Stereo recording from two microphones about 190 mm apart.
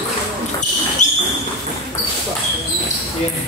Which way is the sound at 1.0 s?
40° left (ahead or behind).